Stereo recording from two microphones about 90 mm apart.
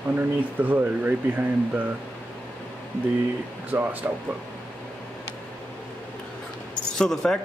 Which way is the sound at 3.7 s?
20° right (ahead or behind).